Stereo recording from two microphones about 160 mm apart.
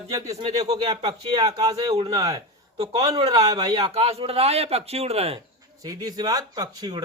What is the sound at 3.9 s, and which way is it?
A man's voice, 40° right (ahead or behind).